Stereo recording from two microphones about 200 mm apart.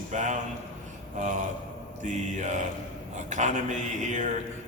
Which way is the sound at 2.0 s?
40° right (ahead or behind).